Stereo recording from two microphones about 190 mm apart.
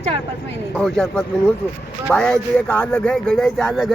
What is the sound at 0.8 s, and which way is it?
Speech, 5° left (ahead or behind).